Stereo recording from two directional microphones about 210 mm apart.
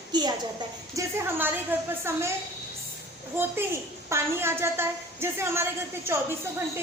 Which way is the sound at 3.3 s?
10° right (ahead or behind).